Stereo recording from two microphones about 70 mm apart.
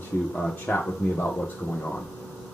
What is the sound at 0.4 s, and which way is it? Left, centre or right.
Speech, centre.